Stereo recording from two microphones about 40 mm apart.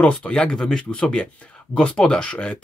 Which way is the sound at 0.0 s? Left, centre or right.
Left.